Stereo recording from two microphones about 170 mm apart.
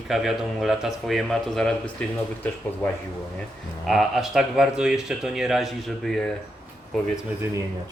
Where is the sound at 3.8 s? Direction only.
Centre (ahead or behind).